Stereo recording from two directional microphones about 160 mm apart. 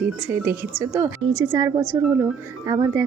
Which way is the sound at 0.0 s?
10° right (ahead or behind).